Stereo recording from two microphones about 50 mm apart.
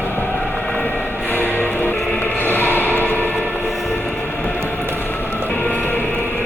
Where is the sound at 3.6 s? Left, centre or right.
Centre.